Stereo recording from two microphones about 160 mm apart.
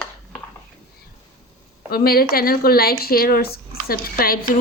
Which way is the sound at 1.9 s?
70° left (ahead or behind).